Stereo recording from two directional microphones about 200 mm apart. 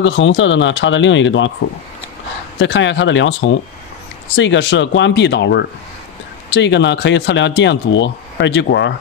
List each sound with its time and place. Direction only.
0.0 s speech: 70° left (ahead or behind)
2.6 s speech: 65° left (ahead or behind)